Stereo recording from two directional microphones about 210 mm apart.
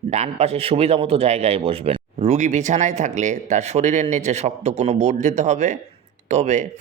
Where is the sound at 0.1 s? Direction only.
30° right (ahead or behind).